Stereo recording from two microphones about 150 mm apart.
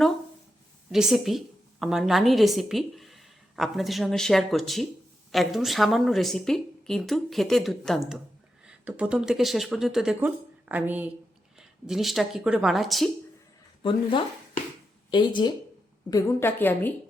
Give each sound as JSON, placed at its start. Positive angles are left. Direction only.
{"t": 0.9, "sound": "speech", "side_deg": -5}
{"t": 15.1, "sound": "speech", "side_deg": 30}
{"t": 16.0, "sound": "a woman's voice", "side_deg": 20}